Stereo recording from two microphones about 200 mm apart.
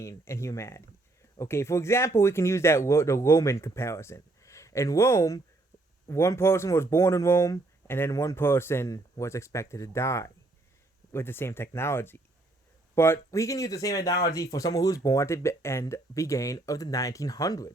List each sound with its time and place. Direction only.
0.0 s speech: 15° left (ahead or behind)